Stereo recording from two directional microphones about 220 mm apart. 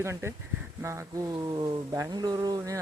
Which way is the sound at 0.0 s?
10° right (ahead or behind).